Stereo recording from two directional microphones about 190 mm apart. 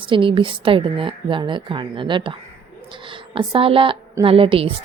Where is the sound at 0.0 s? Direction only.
25° right (ahead or behind).